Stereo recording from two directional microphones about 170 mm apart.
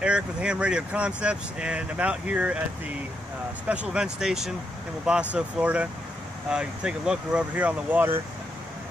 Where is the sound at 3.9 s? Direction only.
5° right (ahead or behind).